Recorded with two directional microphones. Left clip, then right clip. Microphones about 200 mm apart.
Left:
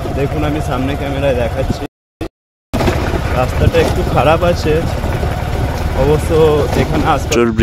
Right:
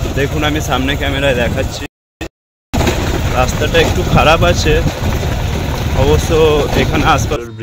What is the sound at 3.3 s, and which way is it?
Speech, 5° left (ahead or behind).